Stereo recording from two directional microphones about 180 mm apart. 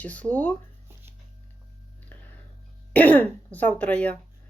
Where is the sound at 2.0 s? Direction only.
10° left (ahead or behind).